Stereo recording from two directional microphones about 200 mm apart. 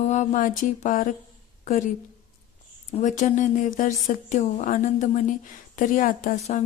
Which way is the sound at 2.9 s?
35° left (ahead or behind).